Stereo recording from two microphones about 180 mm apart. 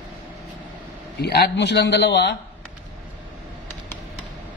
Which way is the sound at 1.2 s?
65° left (ahead or behind).